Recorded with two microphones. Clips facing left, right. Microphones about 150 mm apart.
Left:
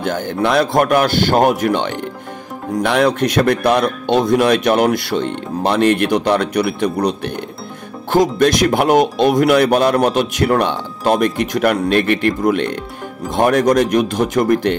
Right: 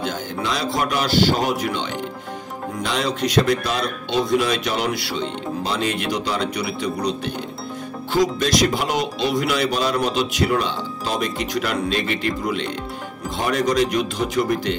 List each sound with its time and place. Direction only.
0.0 s speech: 55° left (ahead or behind)